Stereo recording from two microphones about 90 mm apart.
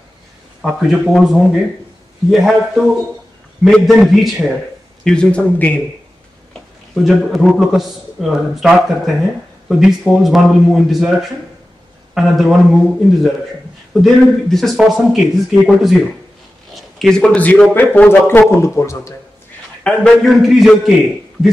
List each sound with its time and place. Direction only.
0.6 s a man's voice: 5° right (ahead or behind)
5.0 s a man's voice: 10° left (ahead or behind)
7.0 s a man's voice: 5° right (ahead or behind)
14.0 s a man's voice: centre (ahead or behind); by 19.1 s 35° left (ahead or behind)
19.8 s a man's voice: 10° left (ahead or behind)